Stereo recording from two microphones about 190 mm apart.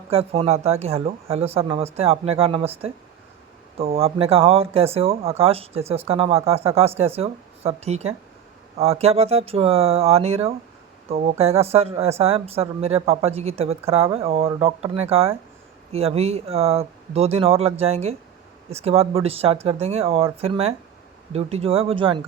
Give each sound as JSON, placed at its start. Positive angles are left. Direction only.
{"t": 0.1, "sound": "speech", "side_deg": -30}